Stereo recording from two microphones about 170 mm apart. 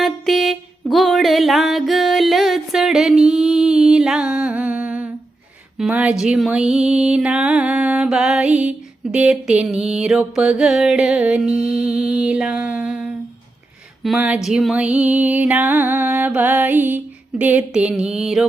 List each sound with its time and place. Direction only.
0.0 s music: centre (ahead or behind)
14.2 s music: 5° right (ahead or behind)